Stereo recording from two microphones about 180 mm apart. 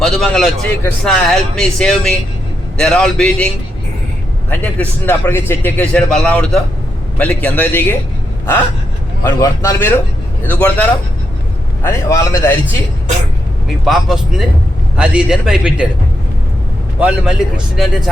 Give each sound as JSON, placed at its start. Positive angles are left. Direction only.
{"t": 0.0, "sound": "a man's voice", "side_deg": 0}
{"t": 9.2, "sound": "a man's voice", "side_deg": 15}
{"t": 13.8, "sound": "speech", "side_deg": 0}
{"t": 17.0, "sound": "a man's voice", "side_deg": -5}